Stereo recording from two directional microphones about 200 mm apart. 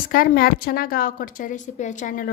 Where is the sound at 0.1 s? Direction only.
45° left (ahead or behind).